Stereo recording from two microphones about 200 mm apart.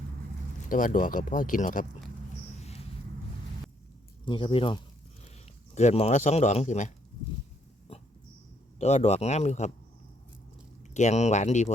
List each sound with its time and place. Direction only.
0.7 s speech: 40° left (ahead or behind)
4.3 s speech: 25° left (ahead or behind)
7.9 s dog: 30° left (ahead or behind)
8.8 s speech: 35° left (ahead or behind)
10.9 s speech: 35° left (ahead or behind)